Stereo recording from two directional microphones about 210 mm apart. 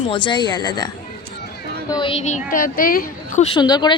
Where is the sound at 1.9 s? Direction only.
25° left (ahead or behind).